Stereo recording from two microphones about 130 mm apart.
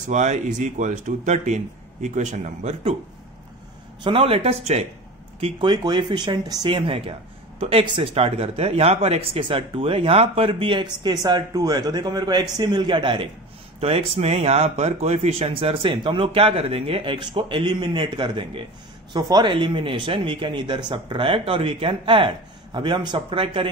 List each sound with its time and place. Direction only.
0.1 s speech: 65° right (ahead or behind)
4.0 s speech: 45° right (ahead or behind)
5.4 s speech: 35° right (ahead or behind)